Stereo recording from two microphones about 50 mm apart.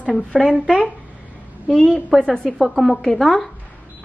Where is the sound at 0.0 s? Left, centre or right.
Left.